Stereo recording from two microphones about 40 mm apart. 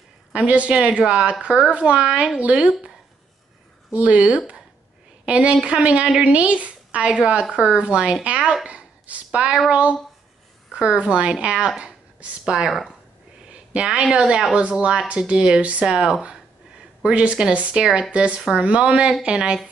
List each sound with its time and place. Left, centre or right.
0.3 s speech: right
3.9 s speech: right
7.5 s speech: right
8.6 s a sound: right
9.7 s speech: right
11.0 s speech: right
11.8 s a sound: right
12.6 s speech: centre
13.9 s speech: right
15.8 s speech: centre
17.0 s speech: right